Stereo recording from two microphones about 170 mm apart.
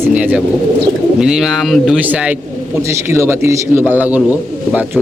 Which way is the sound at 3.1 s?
15° right (ahead or behind).